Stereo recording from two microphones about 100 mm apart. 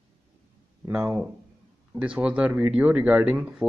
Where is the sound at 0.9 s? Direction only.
15° right (ahead or behind).